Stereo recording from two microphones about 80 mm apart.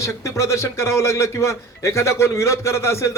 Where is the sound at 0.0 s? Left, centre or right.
Left.